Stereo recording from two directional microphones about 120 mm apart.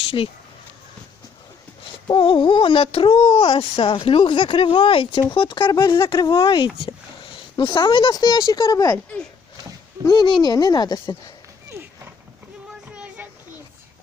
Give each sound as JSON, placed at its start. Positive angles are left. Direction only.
{"t": 2.0, "sound": "speech", "side_deg": 45}
{"t": 6.1, "sound": "speech", "side_deg": 30}
{"t": 6.4, "sound": "speech", "side_deg": 45}
{"t": 6.8, "sound": "a sound", "side_deg": 45}
{"t": 8.1, "sound": "speech", "side_deg": 35}
{"t": 10.0, "sound": "speech", "side_deg": 35}